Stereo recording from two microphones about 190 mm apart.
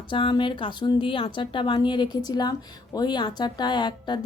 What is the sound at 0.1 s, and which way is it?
Speech, 25° left (ahead or behind).